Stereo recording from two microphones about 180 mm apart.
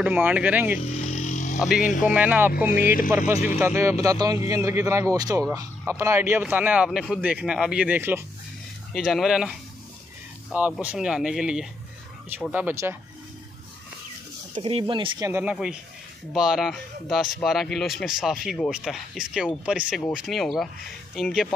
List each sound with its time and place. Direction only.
0.0 s speech: 10° right (ahead or behind)
0.7 s insect: 40° left (ahead or behind)
1.8 s speech: 45° left (ahead or behind)
2.0 s speech: 10° right (ahead or behind)
2.7 s speech: 55° left (ahead or behind)
3.1 s speech: 10° right (ahead or behind)
14.6 s speech: 30° right (ahead or behind)
15.2 s speech: 10° right (ahead or behind)